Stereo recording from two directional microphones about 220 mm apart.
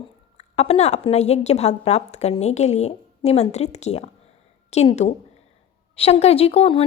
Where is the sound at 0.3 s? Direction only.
30° left (ahead or behind).